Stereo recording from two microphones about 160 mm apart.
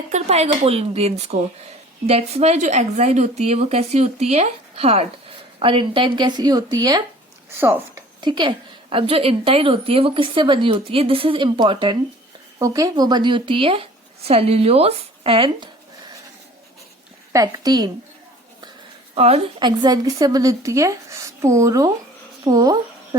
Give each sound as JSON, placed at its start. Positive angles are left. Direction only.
{"t": 0.1, "sound": "a woman's voice", "side_deg": -45}
{"t": 7.5, "sound": "speech", "side_deg": -15}
{"t": 8.2, "sound": "a woman's voice", "side_deg": -30}
{"t": 17.3, "sound": "a woman's voice", "side_deg": -25}
{"t": 19.1, "sound": "a woman's voice", "side_deg": -40}
{"t": 19.6, "sound": "a woman's voice", "side_deg": -25}